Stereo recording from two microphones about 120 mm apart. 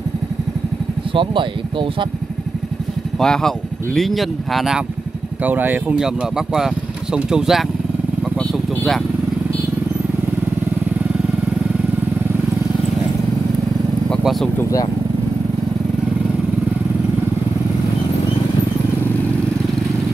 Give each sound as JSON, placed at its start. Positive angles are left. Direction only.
{"t": 1.1, "sound": "speech", "side_deg": -45}
{"t": 3.2, "sound": "speech", "side_deg": 5}
{"t": 5.4, "sound": "speech", "side_deg": -15}
{"t": 14.6, "sound": "speech", "side_deg": 30}